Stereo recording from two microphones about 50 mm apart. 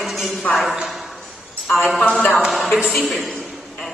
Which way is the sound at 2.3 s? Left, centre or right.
Centre.